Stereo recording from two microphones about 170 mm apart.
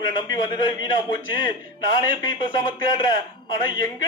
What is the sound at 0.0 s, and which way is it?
A man's voice, 25° left (ahead or behind).